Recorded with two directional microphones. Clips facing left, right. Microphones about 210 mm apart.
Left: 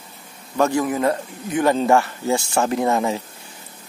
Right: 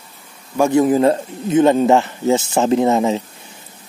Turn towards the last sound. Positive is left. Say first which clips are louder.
# right 5 dB
turn(degrees=-20)  # may be behind; listen again after turning